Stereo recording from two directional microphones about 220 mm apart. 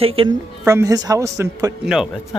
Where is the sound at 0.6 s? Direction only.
15° right (ahead or behind).